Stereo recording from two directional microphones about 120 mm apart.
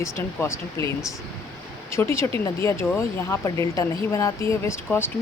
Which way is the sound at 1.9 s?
25° left (ahead or behind).